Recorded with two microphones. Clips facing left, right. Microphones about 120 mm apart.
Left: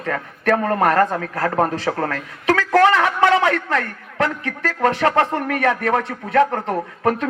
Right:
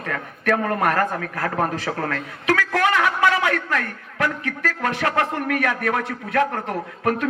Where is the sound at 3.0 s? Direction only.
30° left (ahead or behind).